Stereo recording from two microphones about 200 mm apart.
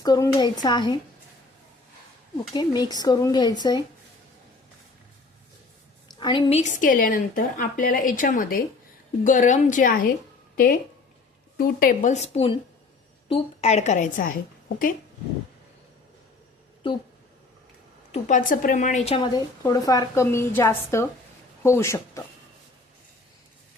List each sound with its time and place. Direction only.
0.0 s a woman's voice: 20° left (ahead or behind)
2.5 s a woman's voice: 20° left (ahead or behind)
6.1 s a woman's voice: 25° left (ahead or behind)
6.6 s a woman's voice: 40° left (ahead or behind)
16.8 s a woman's voice: 25° left (ahead or behind)
18.1 s a woman's voice: 40° left (ahead or behind); by 22.2 s 15° left (ahead or behind)